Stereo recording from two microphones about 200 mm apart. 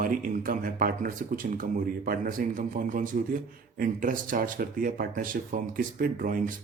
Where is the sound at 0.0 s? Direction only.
45° right (ahead or behind).